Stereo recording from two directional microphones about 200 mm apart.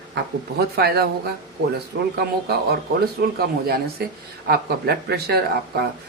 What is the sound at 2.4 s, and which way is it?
Speech, 50° right (ahead or behind).